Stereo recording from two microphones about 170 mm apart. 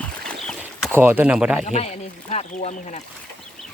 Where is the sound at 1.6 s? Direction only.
40° left (ahead or behind).